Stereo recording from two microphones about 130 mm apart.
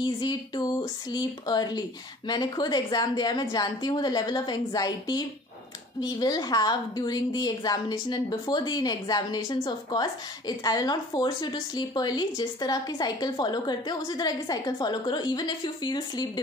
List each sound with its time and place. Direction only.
0.0 s a woman's voice: 35° left (ahead or behind)